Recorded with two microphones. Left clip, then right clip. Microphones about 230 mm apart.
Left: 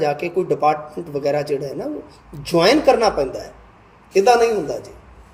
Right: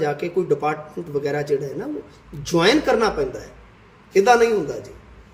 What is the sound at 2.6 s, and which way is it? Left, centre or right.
Speech, centre.